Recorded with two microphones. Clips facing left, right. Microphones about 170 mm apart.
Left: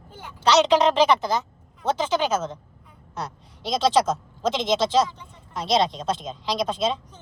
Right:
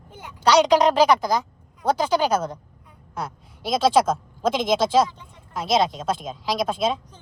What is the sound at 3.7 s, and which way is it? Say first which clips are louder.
Speech: right 2 dB; 5° right (ahead or behind).